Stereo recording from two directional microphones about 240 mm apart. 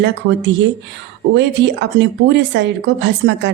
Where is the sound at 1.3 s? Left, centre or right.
Right.